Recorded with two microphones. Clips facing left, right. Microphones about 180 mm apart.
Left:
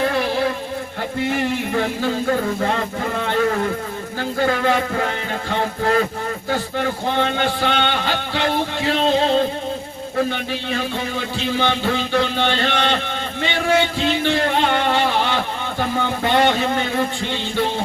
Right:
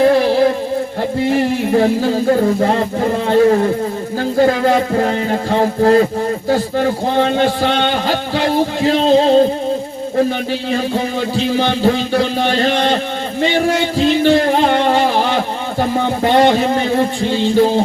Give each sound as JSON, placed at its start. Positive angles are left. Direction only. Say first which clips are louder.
{"t": 0.0, "sound": "music", "louder": "right 9 dB", "side_deg": -35}